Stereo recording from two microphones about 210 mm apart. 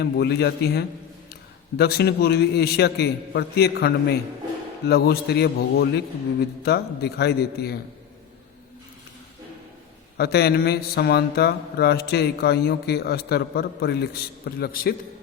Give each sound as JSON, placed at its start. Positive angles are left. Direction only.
{"t": 0.0, "sound": "speech", "side_deg": 50}
{"t": 10.2, "sound": "speech", "side_deg": 50}